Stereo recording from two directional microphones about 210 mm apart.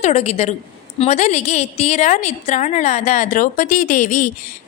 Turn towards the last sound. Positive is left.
turn(degrees=35)  # may be behind; listen again after turning